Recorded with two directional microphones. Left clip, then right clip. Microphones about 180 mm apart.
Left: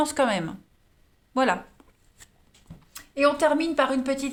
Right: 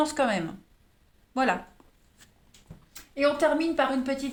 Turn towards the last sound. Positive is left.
turn(degrees=40)  # may be behind; listen again after turning